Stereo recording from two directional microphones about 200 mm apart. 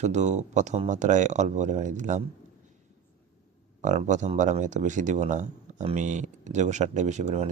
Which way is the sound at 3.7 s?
35° right (ahead or behind).